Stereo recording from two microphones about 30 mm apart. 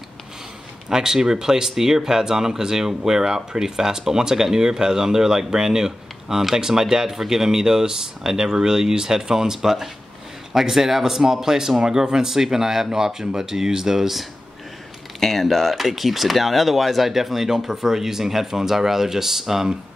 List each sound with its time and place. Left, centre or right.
0.8 s speech: centre
15.1 s speech: centre
15.9 s speech: centre